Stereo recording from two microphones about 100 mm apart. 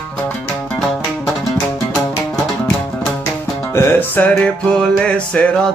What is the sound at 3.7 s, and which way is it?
Music, 25° left (ahead or behind).